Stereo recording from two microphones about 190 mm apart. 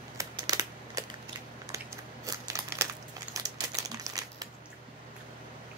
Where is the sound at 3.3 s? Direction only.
20° right (ahead or behind).